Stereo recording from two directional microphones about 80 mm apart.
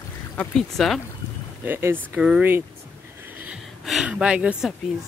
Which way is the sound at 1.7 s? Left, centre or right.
Right.